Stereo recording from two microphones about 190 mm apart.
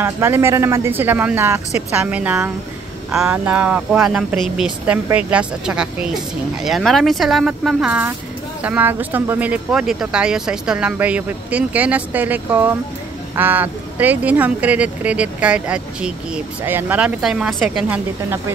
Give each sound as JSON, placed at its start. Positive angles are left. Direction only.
{"t": 0.0, "sound": "speech", "side_deg": -10}